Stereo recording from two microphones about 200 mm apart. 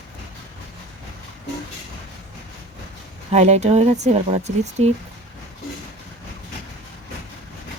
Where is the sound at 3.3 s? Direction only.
35° right (ahead or behind).